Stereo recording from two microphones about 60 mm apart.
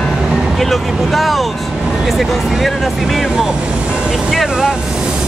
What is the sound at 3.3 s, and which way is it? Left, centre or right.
Vehicle, centre.